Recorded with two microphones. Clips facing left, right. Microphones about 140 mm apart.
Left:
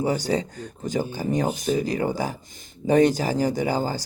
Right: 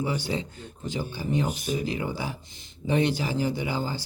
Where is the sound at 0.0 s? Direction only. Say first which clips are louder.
Left 5 dB; 40° left (ahead or behind).